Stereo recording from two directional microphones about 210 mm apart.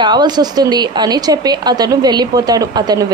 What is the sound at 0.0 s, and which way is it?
A woman's voice, 20° right (ahead or behind).